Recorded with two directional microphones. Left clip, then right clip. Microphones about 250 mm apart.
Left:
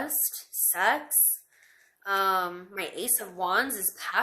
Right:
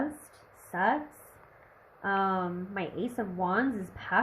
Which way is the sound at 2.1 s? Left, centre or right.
Centre.